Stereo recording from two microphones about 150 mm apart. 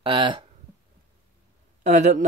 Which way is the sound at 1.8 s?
50° right (ahead or behind).